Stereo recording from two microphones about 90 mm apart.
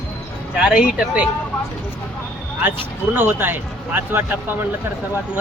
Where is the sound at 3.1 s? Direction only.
25° right (ahead or behind).